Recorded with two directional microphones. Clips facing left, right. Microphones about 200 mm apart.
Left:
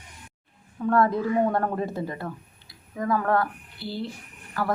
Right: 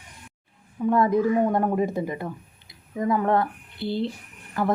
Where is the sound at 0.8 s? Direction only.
15° right (ahead or behind).